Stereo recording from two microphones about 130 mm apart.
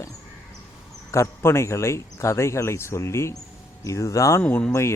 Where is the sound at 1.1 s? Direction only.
20° left (ahead or behind).